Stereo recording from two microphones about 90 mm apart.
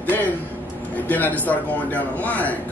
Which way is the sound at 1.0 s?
20° left (ahead or behind).